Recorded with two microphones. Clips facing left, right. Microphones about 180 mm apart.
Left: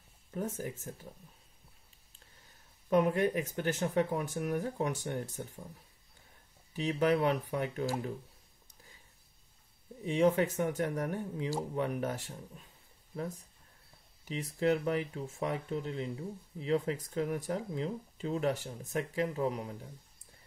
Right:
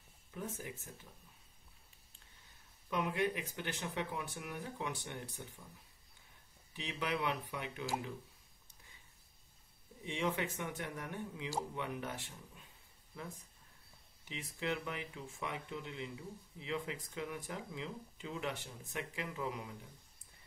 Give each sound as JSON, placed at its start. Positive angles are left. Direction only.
{"t": 0.3, "sound": "speech", "side_deg": 45}
{"t": 2.9, "sound": "speech", "side_deg": 45}
{"t": 6.7, "sound": "speech", "side_deg": 45}
{"t": 10.0, "sound": "speech", "side_deg": 40}
{"t": 14.2, "sound": "speech", "side_deg": 40}